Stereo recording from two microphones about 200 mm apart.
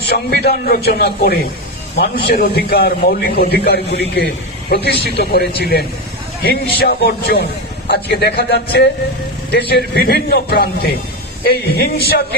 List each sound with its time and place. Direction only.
0.0 s a man's voice: 55° left (ahead or behind)